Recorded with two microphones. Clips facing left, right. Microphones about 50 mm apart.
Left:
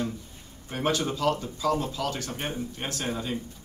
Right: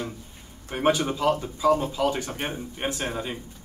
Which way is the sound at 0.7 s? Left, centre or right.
Centre.